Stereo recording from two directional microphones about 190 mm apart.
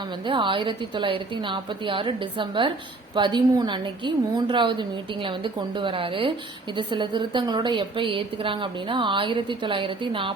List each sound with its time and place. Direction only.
0.3 s a woman's voice: 25° right (ahead or behind)